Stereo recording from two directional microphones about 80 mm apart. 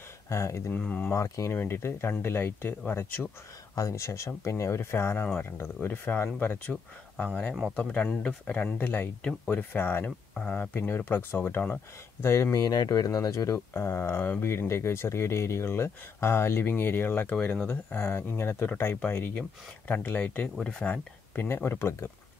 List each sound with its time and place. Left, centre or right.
0.3 s speech: left
0.7 s speech: centre
1.1 s speech: left
3.7 s speech: left; by 8.6 s centre
8.7 s speech: left
12.2 s speech: left
12.5 s speech: left; by 21.5 s centre
21.5 s speech: left